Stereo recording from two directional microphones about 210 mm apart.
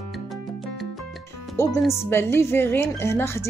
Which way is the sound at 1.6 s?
15° left (ahead or behind).